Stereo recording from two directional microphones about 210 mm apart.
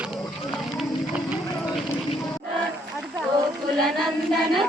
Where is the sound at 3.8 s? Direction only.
Centre (ahead or behind).